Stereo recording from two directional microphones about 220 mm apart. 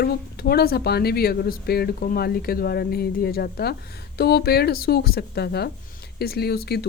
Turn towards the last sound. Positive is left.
turn(degrees=45)  # may be behind; listen again after turning